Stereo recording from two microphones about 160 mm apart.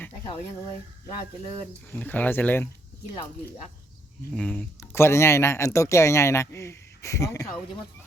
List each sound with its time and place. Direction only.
1.9 s speech: 10° left (ahead or behind)
4.4 s speech: 5° left (ahead or behind)